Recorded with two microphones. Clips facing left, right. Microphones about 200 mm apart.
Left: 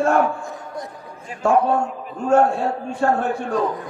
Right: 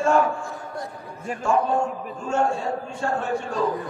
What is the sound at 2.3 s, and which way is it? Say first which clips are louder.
Speech: left 7 dB; 60° left (ahead or behind).